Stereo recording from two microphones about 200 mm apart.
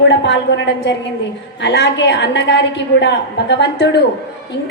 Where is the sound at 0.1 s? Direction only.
65° left (ahead or behind).